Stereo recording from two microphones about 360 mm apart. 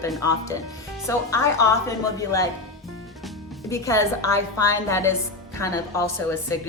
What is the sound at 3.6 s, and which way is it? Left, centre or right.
Speech, centre.